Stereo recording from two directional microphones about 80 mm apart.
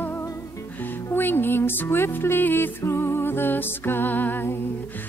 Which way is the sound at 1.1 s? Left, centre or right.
Left.